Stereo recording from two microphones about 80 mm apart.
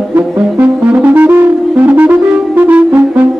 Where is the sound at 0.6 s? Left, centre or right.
Right.